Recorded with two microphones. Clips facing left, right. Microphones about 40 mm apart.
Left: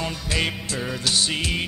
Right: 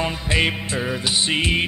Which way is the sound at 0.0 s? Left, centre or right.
Right.